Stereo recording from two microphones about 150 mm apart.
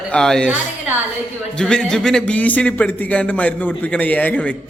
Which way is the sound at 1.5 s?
5° left (ahead or behind).